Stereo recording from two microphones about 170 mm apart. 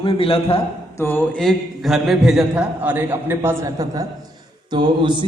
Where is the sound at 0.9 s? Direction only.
10° left (ahead or behind).